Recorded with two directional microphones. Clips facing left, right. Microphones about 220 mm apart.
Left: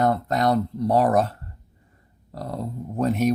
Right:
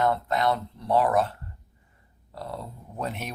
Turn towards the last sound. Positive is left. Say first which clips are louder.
# left 12 dB
turn(degrees=40)  # may be behind; listen again after turning